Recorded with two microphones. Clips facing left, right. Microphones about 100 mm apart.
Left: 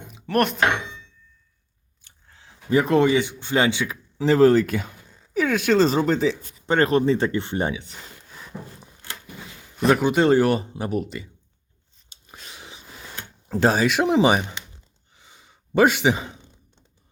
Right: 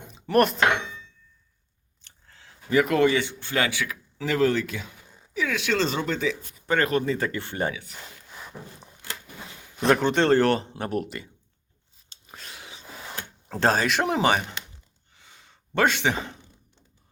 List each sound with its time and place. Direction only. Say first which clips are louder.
0.1 s chopping: right 1 dB; centre (ahead or behind)
2.0 s biting: left 1 dB; 10° left (ahead or behind)
2.6 s speech: left 3 dB; 30° left (ahead or behind)
3.0 s speech: left 2 dB; 15° left (ahead or behind)
9.7 s speech: left 2 dB; 5° left (ahead or behind)
13.5 s speech: left 3 dB; 5° left (ahead or behind)
15.1 s sigh: left 1 dB; 15° left (ahead or behind)